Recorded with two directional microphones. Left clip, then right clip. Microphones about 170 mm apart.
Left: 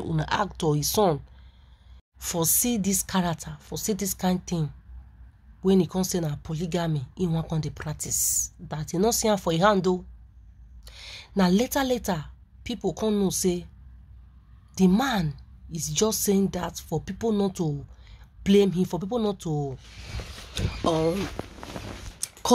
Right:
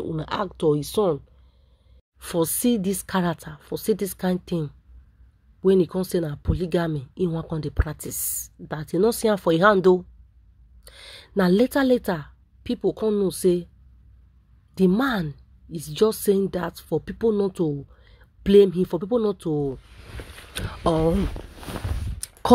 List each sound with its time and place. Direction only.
0.1 s speech: 25° right (ahead or behind)
2.1 s a woman's voice: 25° right (ahead or behind)
13.0 s speech: 15° right (ahead or behind)
13.3 s speech: 30° right (ahead or behind)
15.0 s speech: 35° right (ahead or behind)
18.0 s a sound: 30° right (ahead or behind)
19.1 s speech: 25° right (ahead or behind)
20.5 s speech: 45° right (ahead or behind)